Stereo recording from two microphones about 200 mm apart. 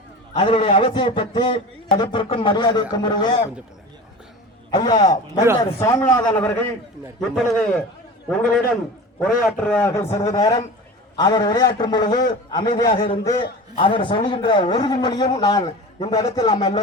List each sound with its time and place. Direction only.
0.3 s a man's voice: 25° left (ahead or behind)
4.7 s a man's voice: 20° left (ahead or behind)
7.2 s a man's voice: 5° left (ahead or behind)